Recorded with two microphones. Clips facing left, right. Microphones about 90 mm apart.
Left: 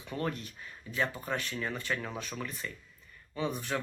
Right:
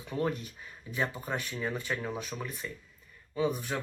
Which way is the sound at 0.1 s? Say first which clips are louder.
Right 3 dB; 15° right (ahead or behind).